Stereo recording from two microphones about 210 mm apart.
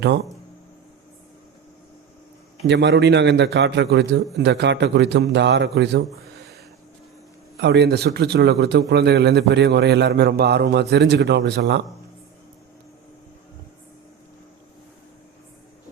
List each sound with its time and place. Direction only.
2.6 s a man's voice: 55° right (ahead or behind)
7.6 s a man's voice: 55° right (ahead or behind)